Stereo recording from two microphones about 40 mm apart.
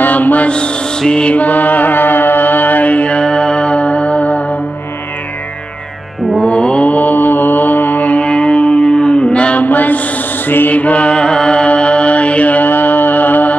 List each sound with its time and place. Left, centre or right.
0.0 s mantra: left
0.5 s mantra: left
1.3 s music: left
6.4 s mantra: left
6.9 s mantra: left
8.2 s music: left
9.6 s mantra: left
10.7 s music: left